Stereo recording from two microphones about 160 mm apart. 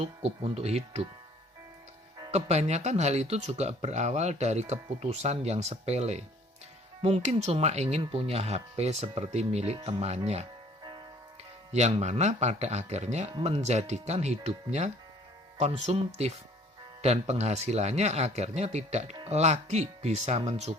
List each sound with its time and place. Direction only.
0.0 s speech: 40° right (ahead or behind)
2.3 s speech: 45° right (ahead or behind)
11.7 s speech: 45° right (ahead or behind)